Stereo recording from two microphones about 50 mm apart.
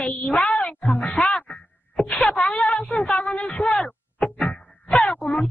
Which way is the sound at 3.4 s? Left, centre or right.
Left.